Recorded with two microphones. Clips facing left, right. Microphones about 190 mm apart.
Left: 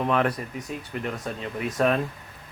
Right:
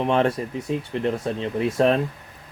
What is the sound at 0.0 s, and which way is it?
Speech, 25° right (ahead or behind).